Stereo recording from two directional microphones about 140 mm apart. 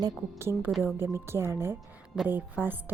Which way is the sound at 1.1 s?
15° right (ahead or behind).